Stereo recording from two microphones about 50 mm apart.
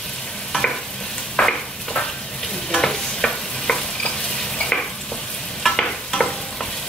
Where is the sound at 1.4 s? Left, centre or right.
Centre.